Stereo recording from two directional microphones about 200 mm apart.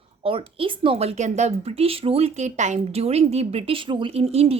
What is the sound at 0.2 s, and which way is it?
Speech, 25° right (ahead or behind).